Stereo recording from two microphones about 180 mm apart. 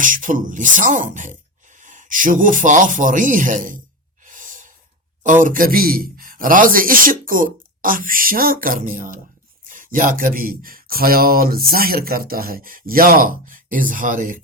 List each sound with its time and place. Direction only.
0.0 s speech: 45° right (ahead or behind)
4.3 s breathing: 45° right (ahead or behind)
5.2 s speech: 45° right (ahead or behind)